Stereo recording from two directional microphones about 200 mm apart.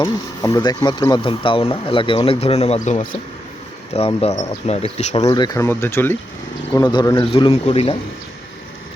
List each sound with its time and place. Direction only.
0.0 s speech: 20° left (ahead or behind)